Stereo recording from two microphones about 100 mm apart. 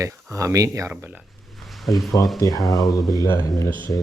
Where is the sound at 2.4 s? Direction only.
40° left (ahead or behind).